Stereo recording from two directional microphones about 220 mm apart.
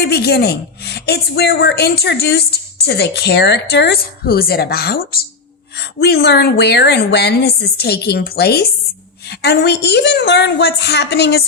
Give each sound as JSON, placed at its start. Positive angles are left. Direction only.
{"t": 0.0, "sound": "a woman's voice", "side_deg": 45}